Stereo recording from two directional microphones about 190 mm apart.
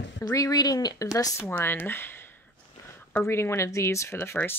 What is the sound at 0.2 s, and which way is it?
Speech, 20° left (ahead or behind).